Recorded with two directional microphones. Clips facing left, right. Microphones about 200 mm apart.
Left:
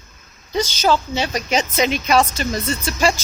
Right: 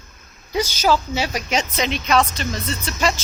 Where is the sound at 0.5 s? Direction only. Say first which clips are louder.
Left 1 dB; 10° right (ahead or behind).